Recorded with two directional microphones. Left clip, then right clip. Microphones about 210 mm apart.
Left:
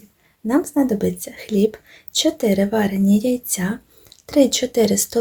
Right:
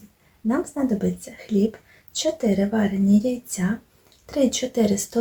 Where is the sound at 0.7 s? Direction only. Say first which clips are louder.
Left 6 dB; 40° left (ahead or behind).